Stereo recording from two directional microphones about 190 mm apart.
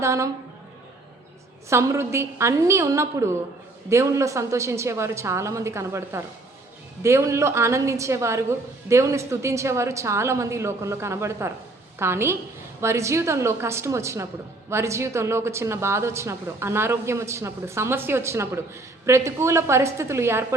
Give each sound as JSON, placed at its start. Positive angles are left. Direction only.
{"t": 0.0, "sound": "speech", "side_deg": -15}
{"t": 1.7, "sound": "speech", "side_deg": -15}